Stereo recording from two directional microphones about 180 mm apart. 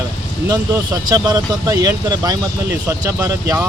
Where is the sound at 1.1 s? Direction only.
20° right (ahead or behind).